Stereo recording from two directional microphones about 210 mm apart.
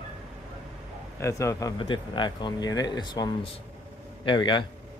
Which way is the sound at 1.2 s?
15° left (ahead or behind).